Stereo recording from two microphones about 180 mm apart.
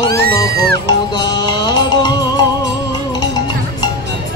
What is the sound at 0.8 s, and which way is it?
Music, 25° left (ahead or behind).